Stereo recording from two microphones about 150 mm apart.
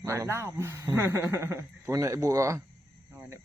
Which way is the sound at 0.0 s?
15° right (ahead or behind).